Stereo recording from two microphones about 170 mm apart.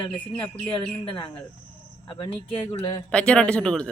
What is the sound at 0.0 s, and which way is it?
Speech, 30° left (ahead or behind).